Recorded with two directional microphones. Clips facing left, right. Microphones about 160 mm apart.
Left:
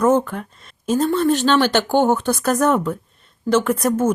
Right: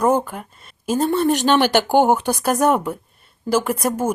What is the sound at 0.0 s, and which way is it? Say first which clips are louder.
A woman's voice: left 2 dB; 10° right (ahead or behind).